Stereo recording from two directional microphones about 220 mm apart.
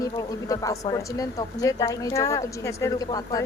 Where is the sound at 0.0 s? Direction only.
15° left (ahead or behind).